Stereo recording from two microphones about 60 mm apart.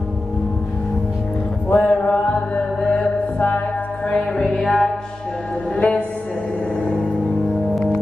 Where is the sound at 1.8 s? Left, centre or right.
Centre.